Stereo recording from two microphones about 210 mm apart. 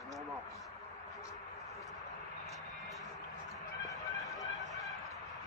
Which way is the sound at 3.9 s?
15° left (ahead or behind).